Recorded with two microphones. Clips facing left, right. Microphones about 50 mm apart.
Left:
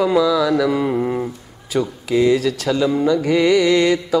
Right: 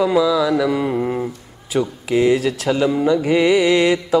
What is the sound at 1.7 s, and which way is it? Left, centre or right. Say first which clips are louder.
A man's voice: even; centre.